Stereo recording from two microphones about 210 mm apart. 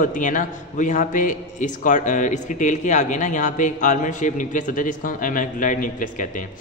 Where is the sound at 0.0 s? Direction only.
40° left (ahead or behind).